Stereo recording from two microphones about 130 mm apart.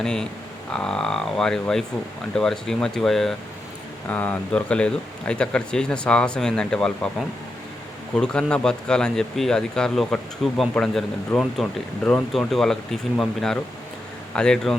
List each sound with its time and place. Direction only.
0.0 s speech: 5° left (ahead or behind)